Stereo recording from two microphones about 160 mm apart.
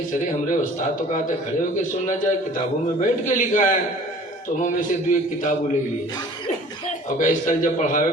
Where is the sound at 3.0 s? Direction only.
50° left (ahead or behind).